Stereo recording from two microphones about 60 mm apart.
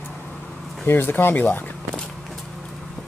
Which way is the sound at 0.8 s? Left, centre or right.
Left.